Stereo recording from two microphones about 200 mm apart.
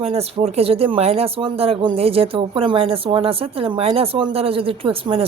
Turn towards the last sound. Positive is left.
turn(degrees=-30)  # may be behind; listen again after turning